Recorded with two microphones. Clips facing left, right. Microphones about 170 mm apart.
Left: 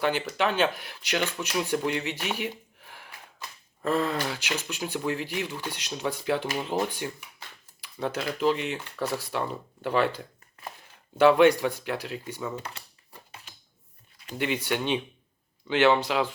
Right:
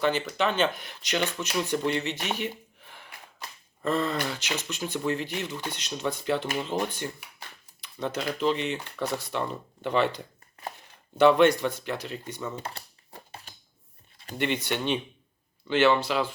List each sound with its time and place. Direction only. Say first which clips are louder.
0.0 s speech: even; 10° left (ahead or behind)
2.4 s a sound: even; 10° left (ahead or behind)
3.8 s speech: left 1 dB; 10° left (ahead or behind)
12.6 s typing: right 3 dB; 35° right (ahead or behind)
14.3 s speech: even; 10° left (ahead or behind)